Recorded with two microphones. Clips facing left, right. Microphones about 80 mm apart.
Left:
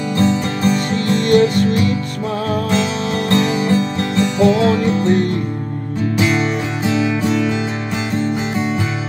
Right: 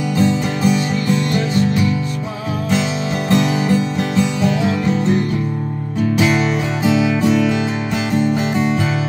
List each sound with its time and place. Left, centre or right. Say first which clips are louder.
0.2 s music: even; centre
0.7 s music: even; left
3.3 s music: even; centre
6.1 s music: even; centre